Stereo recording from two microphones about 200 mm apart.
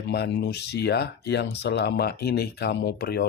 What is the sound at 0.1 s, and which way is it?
Speech, 55° left (ahead or behind).